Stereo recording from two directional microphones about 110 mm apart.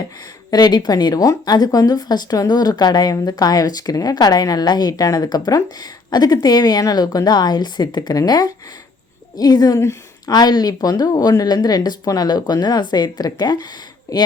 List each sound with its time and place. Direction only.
0.5 s speech: 40° left (ahead or behind)